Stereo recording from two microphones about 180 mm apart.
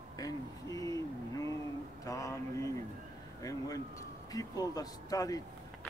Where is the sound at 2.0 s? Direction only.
20° left (ahead or behind).